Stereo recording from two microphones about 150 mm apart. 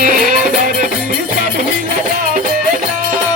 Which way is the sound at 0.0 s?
65° right (ahead or behind).